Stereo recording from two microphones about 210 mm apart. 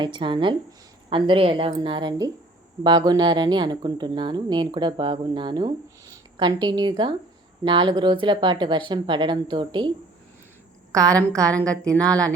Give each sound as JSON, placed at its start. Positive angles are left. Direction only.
{"t": 0.0, "sound": "speech", "side_deg": -20}
{"t": 10.9, "sound": "a woman's voice", "side_deg": -15}
{"t": 11.4, "sound": "a woman's voice", "side_deg": 5}